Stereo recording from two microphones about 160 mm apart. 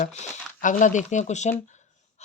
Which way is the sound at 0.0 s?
50° left (ahead or behind).